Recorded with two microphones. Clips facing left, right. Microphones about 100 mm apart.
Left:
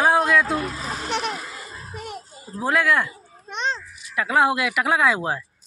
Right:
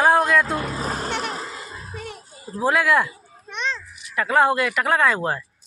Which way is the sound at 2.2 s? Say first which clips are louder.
Right 7 dB; 5° right (ahead or behind).